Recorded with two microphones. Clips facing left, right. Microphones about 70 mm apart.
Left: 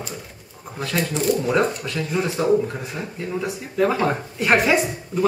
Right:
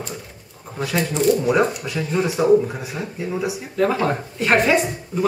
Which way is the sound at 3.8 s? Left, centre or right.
Centre.